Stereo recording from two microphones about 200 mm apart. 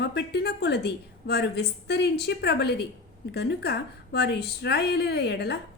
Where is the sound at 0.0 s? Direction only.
55° left (ahead or behind).